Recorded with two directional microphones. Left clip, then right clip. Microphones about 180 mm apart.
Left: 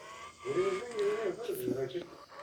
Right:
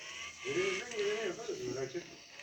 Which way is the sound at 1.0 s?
45° left (ahead or behind).